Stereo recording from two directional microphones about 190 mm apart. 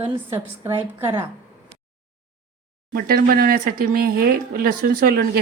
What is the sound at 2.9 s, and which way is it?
Speech, 50° right (ahead or behind).